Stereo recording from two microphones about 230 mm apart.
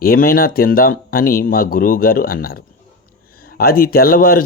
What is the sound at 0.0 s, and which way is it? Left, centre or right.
Speech, left.